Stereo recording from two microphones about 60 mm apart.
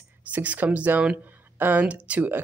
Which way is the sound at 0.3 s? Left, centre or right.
Right.